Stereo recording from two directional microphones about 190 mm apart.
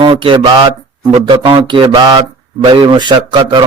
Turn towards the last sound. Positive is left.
turn(degrees=-25)  # may be behind; listen again after turning